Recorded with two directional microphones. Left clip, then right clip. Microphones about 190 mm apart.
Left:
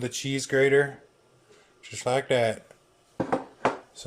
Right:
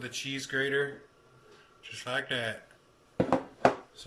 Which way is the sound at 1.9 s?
35° left (ahead or behind).